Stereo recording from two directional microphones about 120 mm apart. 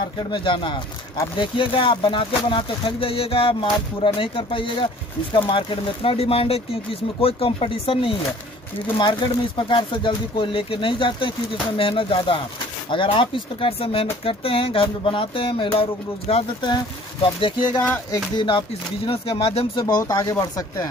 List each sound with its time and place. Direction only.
0.3 s speech: 45° left (ahead or behind)
16.6 s speech: 45° left (ahead or behind)
17.7 s music: 10° left (ahead or behind)
19.0 s speech: 50° left (ahead or behind)
19.8 s speech: 30° left (ahead or behind)